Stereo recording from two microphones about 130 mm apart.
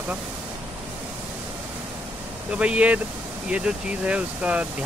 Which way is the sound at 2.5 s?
10° right (ahead or behind).